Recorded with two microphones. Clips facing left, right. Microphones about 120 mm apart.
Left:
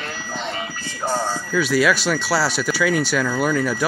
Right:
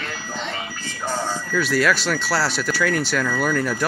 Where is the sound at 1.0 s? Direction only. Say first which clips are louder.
Left 3 dB; 10° left (ahead or behind).